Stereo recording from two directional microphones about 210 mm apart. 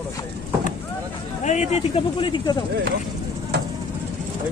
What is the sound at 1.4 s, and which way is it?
Speech, 35° left (ahead or behind).